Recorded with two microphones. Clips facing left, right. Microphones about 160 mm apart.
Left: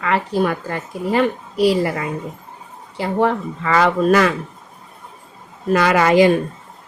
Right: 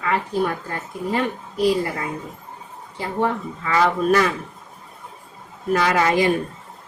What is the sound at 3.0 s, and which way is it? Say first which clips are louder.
A woman's voice: left 5 dB; 90° left.